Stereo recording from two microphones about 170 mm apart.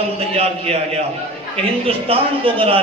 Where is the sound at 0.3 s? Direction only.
40° right (ahead or behind).